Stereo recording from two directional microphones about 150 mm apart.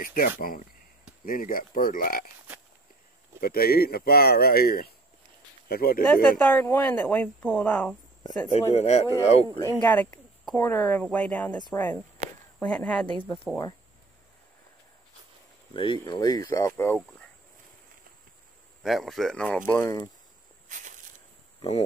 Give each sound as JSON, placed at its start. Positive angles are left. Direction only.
{"t": 0.0, "sound": "speech", "side_deg": 65}
{"t": 3.3, "sound": "speech", "side_deg": 90}
{"t": 6.3, "sound": "speech", "side_deg": 15}
{"t": 8.7, "sound": "speech", "side_deg": 45}
{"t": 9.8, "sound": "speech", "side_deg": 10}
{"t": 15.7, "sound": "speech", "side_deg": 35}
{"t": 16.0, "sound": "speech", "side_deg": 25}
{"t": 18.8, "sound": "speech", "side_deg": 0}
{"t": 20.6, "sound": "snake", "side_deg": -55}
{"t": 21.5, "sound": "speech", "side_deg": 45}